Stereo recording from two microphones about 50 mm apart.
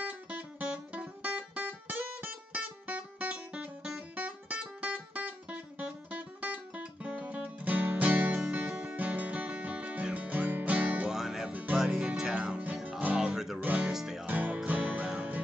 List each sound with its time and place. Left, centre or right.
0.0 s music: right
11.1 s music: centre
13.6 s speech: right
13.9 s music: centre
14.2 s music: right